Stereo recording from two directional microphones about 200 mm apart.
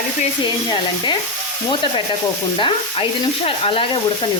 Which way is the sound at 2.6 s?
25° left (ahead or behind).